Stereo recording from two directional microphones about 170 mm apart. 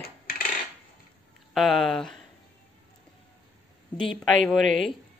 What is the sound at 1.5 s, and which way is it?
Speech, centre (ahead or behind).